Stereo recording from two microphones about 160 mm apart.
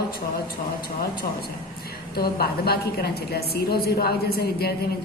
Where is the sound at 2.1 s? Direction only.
75° left (ahead or behind).